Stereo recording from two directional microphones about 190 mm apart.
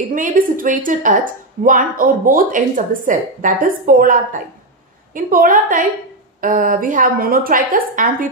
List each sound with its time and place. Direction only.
0.1 s a woman's voice: 45° right (ahead or behind)